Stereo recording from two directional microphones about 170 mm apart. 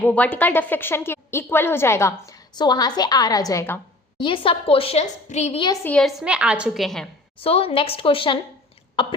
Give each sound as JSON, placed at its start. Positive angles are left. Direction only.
{"t": 0.0, "sound": "a woman's voice", "side_deg": 10}
{"t": 4.2, "sound": "a woman's voice", "side_deg": 30}
{"t": 5.6, "sound": "a woman's voice", "side_deg": 20}
{"t": 5.9, "sound": "a woman's voice", "side_deg": 0}
{"t": 7.3, "sound": "a woman's voice", "side_deg": 35}